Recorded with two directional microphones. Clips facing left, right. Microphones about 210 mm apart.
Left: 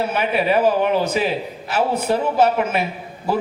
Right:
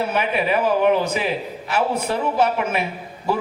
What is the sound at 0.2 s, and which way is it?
Speech, 35° left (ahead or behind).